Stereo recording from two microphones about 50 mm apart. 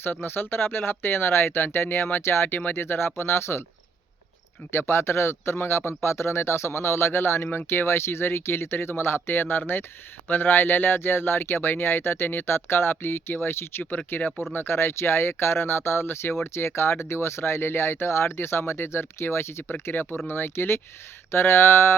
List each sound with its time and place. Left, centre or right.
0.0 s speech: left
4.7 s speech: left